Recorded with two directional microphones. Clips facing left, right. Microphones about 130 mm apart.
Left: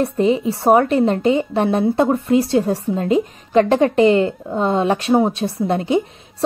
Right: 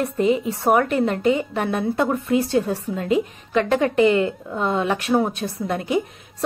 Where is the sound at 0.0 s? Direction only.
30° left (ahead or behind).